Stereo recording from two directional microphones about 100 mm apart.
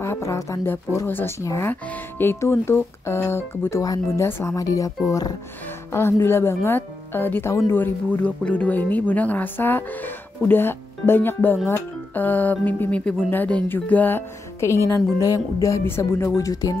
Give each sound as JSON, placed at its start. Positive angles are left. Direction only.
{"t": 0.0, "sound": "speech", "side_deg": 30}
{"t": 1.4, "sound": "speech", "side_deg": 30}
{"t": 1.7, "sound": "speech", "side_deg": 20}
{"t": 3.8, "sound": "speech", "side_deg": 40}
{"t": 4.3, "sound": "speech", "side_deg": 25}
{"t": 8.2, "sound": "speech", "side_deg": 15}